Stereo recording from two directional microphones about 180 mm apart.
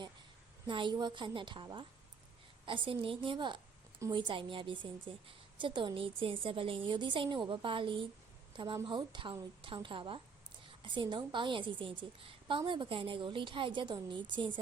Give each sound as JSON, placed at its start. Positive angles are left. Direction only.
{"t": 0.7, "sound": "a woman's voice", "side_deg": -25}